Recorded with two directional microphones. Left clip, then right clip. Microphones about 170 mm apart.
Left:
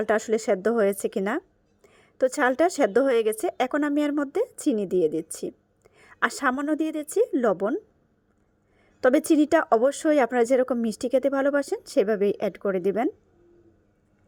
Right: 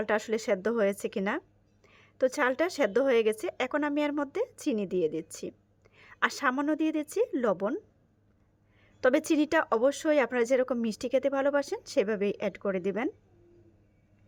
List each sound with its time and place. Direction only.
0.0 s speech: 30° left (ahead or behind)
9.0 s a woman's voice: 30° left (ahead or behind)